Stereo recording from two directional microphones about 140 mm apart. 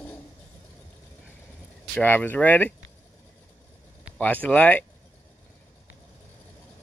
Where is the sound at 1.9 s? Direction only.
15° left (ahead or behind).